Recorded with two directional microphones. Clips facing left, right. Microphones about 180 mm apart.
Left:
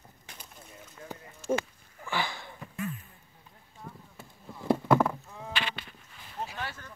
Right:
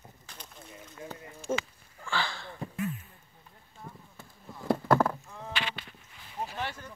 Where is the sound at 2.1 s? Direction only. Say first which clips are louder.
Even; 15° left (ahead or behind).